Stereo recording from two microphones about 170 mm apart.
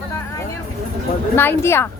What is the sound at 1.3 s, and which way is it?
Speech, 15° left (ahead or behind).